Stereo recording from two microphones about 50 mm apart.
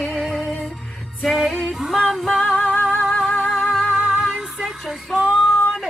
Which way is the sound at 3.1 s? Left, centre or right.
Centre.